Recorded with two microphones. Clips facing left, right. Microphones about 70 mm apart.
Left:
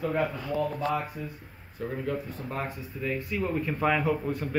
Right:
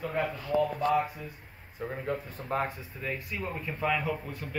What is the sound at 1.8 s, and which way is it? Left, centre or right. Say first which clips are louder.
Speech: left 2 dB; right.